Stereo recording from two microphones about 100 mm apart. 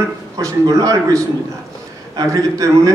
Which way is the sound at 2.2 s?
35° right (ahead or behind).